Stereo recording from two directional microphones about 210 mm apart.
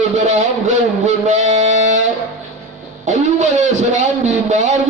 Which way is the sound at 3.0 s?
35° right (ahead or behind).